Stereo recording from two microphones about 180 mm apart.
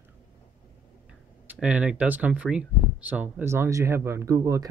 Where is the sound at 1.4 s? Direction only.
10° right (ahead or behind).